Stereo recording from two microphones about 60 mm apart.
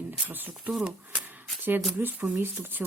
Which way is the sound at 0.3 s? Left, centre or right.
Right.